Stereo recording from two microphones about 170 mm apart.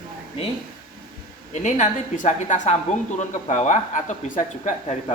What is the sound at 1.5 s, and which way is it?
A woman's voice, 45° left (ahead or behind).